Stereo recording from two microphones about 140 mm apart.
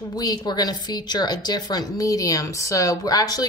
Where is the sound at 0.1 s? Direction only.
30° left (ahead or behind).